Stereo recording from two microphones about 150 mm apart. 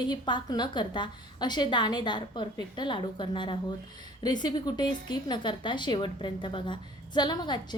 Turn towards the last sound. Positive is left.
turn(degrees=30)  # may be behind; listen again after turning